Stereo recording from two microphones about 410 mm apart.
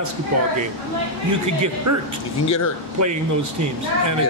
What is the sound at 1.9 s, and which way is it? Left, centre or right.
Speech, right.